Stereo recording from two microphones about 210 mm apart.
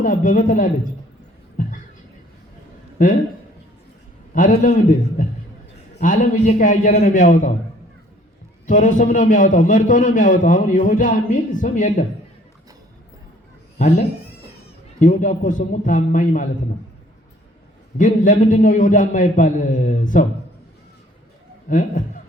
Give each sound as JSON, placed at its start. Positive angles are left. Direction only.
{"t": 0.0, "sound": "a man's voice", "side_deg": 40}
{"t": 3.0, "sound": "a man's voice", "side_deg": 40}
{"t": 4.4, "sound": "a man's voice", "side_deg": 35}
{"t": 8.6, "sound": "a man's voice", "side_deg": 40}
{"t": 14.9, "sound": "a man's voice", "side_deg": 40}
{"t": 17.9, "sound": "a man's voice", "side_deg": 40}
{"t": 21.7, "sound": "a man's voice", "side_deg": 40}